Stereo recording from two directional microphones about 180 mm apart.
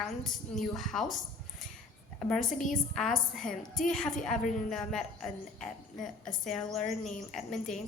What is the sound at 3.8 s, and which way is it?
A woman's voice, 5° left (ahead or behind).